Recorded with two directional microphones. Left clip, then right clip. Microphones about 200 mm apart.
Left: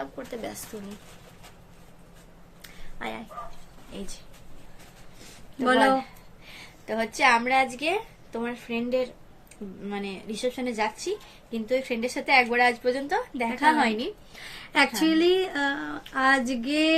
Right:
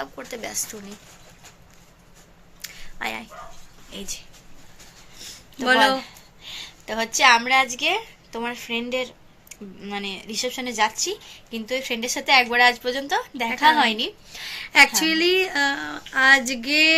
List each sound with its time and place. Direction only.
0.0 s speech: 5° left (ahead or behind)
2.6 s a sound: 5° left (ahead or behind)
5.8 s a woman's voice: centre (ahead or behind)
14.6 s speech: 15° left (ahead or behind)